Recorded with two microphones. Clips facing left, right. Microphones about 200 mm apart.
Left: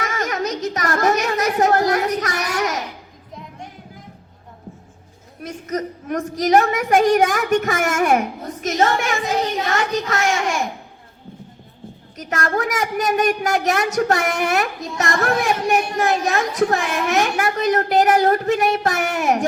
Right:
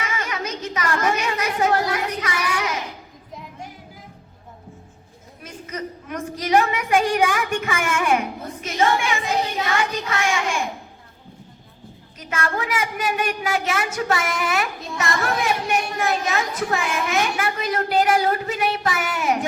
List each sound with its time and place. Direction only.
0.0 s a sound: 40° left (ahead or behind)
5.4 s a woman's voice: 40° left (ahead or behind)
12.1 s a woman's voice: 40° left (ahead or behind)